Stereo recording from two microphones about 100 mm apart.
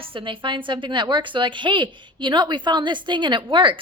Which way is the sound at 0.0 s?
60° right (ahead or behind).